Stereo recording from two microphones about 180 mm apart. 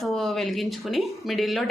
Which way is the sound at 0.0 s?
Centre (ahead or behind).